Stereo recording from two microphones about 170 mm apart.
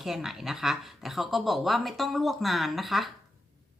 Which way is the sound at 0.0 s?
Centre (ahead or behind).